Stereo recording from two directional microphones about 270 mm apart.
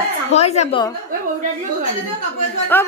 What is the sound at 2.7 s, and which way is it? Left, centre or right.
Speech, centre.